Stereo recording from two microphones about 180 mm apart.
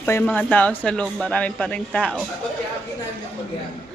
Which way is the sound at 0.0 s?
15° left (ahead or behind).